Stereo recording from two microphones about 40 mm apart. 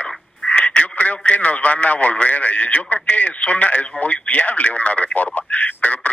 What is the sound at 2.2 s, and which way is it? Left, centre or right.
Speech, left.